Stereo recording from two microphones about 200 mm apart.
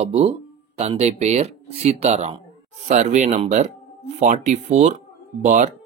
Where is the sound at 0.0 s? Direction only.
35° right (ahead or behind).